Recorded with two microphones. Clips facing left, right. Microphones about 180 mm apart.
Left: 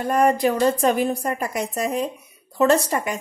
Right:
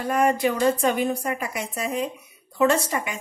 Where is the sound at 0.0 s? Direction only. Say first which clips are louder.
Left 3 dB; 40° left (ahead or behind).